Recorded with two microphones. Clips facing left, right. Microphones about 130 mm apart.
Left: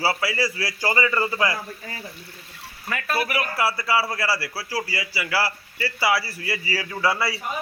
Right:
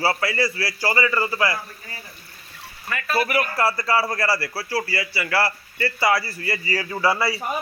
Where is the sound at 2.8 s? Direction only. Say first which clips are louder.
Right 2 dB; 5° left (ahead or behind).